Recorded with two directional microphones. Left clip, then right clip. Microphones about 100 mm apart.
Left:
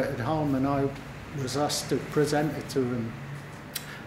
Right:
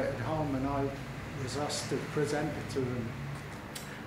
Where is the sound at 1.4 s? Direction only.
40° left (ahead or behind).